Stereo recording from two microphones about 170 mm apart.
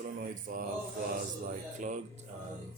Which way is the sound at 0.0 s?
55° right (ahead or behind).